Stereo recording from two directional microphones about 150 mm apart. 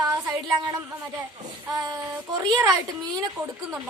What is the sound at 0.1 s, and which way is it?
A woman's voice, 25° right (ahead or behind).